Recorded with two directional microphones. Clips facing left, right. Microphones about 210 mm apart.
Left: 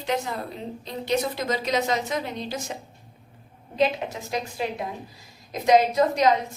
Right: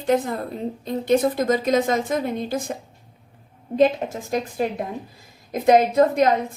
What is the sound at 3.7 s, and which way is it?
A woman's voice, 50° right (ahead or behind).